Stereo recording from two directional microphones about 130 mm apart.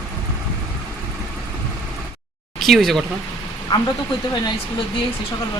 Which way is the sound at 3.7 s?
35° left (ahead or behind).